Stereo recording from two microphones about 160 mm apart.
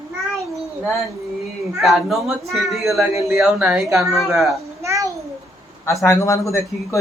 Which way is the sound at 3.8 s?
20° right (ahead or behind).